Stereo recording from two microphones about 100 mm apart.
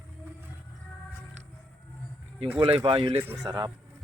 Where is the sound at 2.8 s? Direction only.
70° right (ahead or behind).